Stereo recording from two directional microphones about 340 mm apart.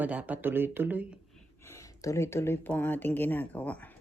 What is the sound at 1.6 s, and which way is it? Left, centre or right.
Speech, centre.